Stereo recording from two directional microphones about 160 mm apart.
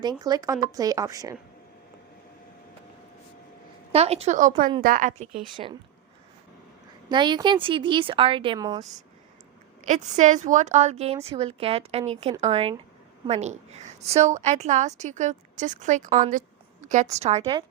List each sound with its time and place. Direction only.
0.0 s speech: 25° right (ahead or behind)
3.9 s a woman's voice: 40° right (ahead or behind)
5.6 s a woman's voice: 40° right (ahead or behind)
7.1 s a woman's voice: 30° right (ahead or behind)
9.8 s a woman's voice: 50° right (ahead or behind)